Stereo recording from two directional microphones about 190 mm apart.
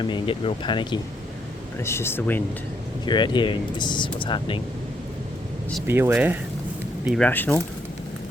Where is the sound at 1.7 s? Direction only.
15° left (ahead or behind).